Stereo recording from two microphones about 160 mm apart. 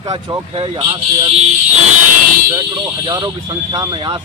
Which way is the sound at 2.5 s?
25° right (ahead or behind).